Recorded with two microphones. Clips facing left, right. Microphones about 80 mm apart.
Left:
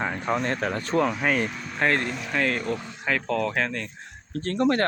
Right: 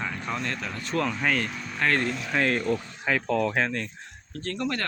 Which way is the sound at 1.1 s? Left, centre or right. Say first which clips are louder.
Left 2 dB; centre.